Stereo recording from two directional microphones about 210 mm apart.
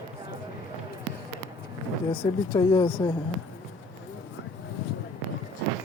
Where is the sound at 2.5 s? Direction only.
20° left (ahead or behind).